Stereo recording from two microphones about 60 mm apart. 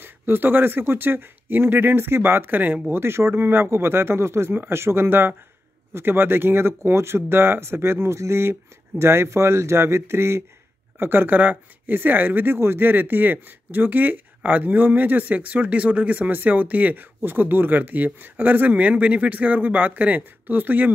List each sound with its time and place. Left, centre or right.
0.0 s speech: right
2.9 s speech: right